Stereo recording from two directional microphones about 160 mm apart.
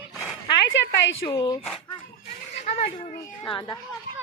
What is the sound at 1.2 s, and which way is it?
Speech, 25° left (ahead or behind).